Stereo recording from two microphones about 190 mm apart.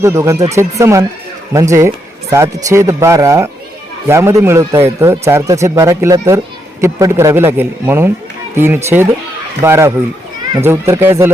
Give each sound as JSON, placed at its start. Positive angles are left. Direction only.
{"t": 0.0, "sound": "a man's voice", "side_deg": -15}